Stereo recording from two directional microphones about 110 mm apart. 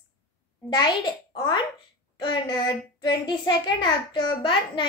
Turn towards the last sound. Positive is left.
turn(degrees=50)  # may be behind; listen again after turning